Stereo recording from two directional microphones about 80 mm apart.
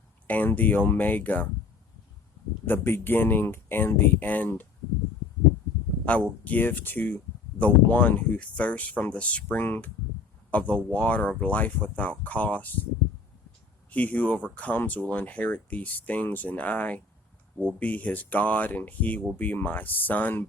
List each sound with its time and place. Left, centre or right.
0.3 s speech: left
2.6 s speech: left
6.1 s speech: centre
13.9 s speech: centre